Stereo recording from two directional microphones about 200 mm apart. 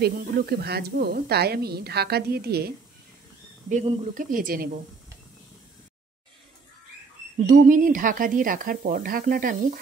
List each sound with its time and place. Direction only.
0.0 s a woman's voice: 50° right (ahead or behind)
3.6 s speech: 35° right (ahead or behind)
7.4 s a woman's voice: 40° right (ahead or behind)